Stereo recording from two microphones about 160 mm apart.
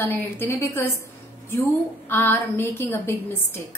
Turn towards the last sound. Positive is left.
turn(degrees=15)  # may be behind; listen again after turning